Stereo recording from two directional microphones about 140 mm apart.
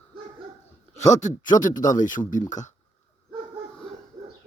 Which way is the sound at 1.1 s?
60° left (ahead or behind).